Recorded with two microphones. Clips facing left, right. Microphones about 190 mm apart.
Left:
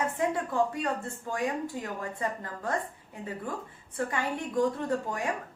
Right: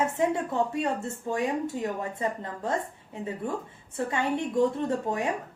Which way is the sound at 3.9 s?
25° right (ahead or behind).